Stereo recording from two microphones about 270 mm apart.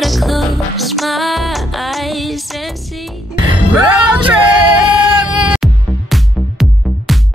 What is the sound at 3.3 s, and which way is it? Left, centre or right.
Music, centre.